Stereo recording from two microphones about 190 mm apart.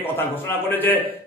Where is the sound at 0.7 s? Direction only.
10° left (ahead or behind).